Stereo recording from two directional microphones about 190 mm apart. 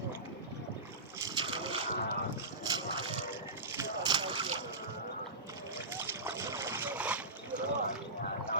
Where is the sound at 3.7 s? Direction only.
20° right (ahead or behind).